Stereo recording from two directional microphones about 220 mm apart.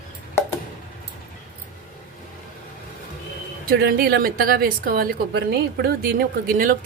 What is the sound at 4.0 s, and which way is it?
A woman's voice, 45° right (ahead or behind).